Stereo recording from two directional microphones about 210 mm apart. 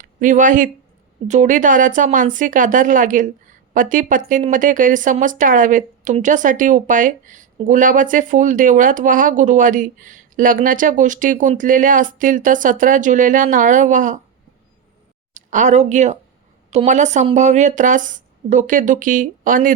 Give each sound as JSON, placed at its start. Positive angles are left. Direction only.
{"t": 0.0, "sound": "speech", "side_deg": -35}
{"t": 15.3, "sound": "speech", "side_deg": -35}